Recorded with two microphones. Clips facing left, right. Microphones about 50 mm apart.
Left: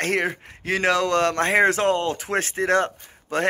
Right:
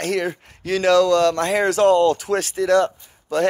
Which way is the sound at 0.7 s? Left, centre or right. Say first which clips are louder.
Right 5 dB; left.